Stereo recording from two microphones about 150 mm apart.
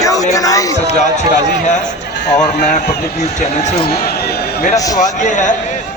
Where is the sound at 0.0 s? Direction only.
20° left (ahead or behind).